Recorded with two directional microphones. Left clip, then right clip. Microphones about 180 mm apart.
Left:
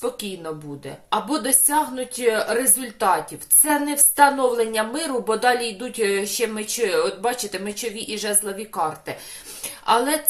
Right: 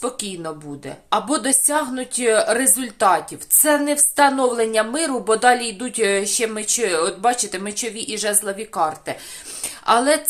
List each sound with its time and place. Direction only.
0.0 s a woman's voice: 30° right (ahead or behind)